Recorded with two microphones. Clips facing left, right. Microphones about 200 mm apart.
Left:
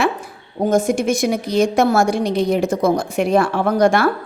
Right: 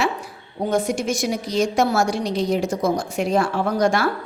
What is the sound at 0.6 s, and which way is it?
A woman's voice, 45° left (ahead or behind).